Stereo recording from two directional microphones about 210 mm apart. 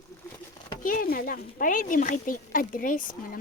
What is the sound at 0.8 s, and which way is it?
Speech, 40° left (ahead or behind).